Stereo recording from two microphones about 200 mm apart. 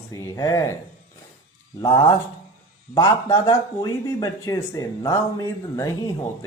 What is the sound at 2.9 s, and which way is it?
Speech, 20° left (ahead or behind).